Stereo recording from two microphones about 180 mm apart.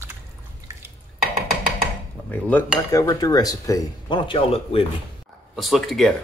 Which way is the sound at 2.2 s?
10° left (ahead or behind).